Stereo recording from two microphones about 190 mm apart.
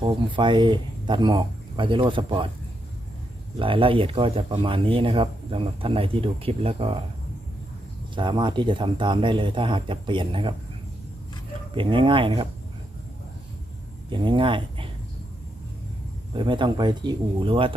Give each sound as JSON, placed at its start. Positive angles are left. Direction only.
{"t": 0.0, "sound": "speech", "side_deg": -25}
{"t": 3.6, "sound": "speech", "side_deg": -30}
{"t": 8.1, "sound": "speech", "side_deg": -25}
{"t": 11.7, "sound": "speech", "side_deg": -25}
{"t": 14.1, "sound": "speech", "side_deg": -25}
{"t": 16.3, "sound": "speech", "side_deg": -25}